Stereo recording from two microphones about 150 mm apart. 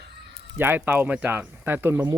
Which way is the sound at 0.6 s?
15° right (ahead or behind).